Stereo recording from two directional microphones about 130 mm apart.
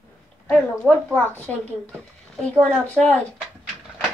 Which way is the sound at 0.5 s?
10° left (ahead or behind).